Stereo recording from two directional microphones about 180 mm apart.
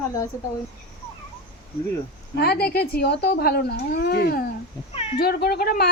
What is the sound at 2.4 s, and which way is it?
Speech, 60° left (ahead or behind).